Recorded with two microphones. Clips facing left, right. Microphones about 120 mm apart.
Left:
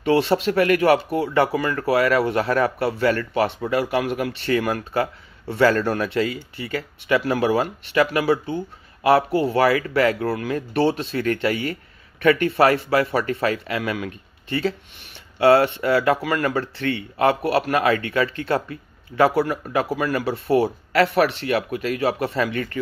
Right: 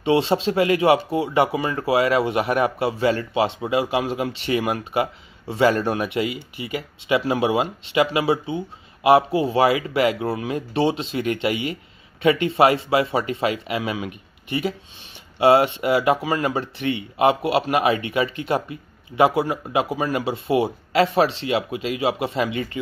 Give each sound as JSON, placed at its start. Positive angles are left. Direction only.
{"t": 0.0, "sound": "speech", "side_deg": -20}